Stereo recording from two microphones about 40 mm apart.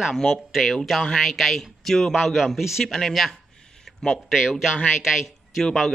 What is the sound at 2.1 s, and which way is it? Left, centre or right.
A man's voice, centre.